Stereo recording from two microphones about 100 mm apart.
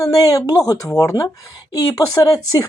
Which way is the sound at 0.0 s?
35° left (ahead or behind).